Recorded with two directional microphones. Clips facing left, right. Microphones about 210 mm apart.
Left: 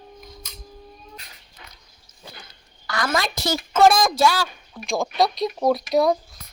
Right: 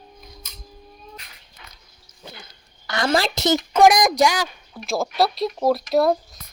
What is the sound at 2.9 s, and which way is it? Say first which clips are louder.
A woman's voice: right 3 dB; 25° right (ahead or behind).